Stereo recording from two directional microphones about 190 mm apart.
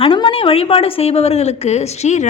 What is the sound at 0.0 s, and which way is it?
A woman's voice, 30° left (ahead or behind).